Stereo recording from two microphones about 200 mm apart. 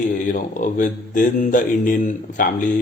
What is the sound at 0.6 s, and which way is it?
Speech, 40° left (ahead or behind).